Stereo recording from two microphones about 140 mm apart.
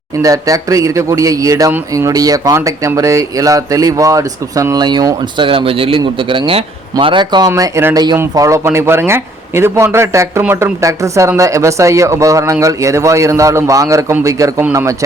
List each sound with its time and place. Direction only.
0.2 s speech: 25° right (ahead or behind)